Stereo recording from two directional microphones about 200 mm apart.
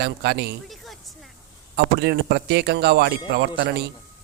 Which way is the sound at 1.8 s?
55° right (ahead or behind).